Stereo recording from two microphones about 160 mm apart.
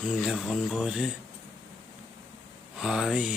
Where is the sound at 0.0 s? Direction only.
5° right (ahead or behind).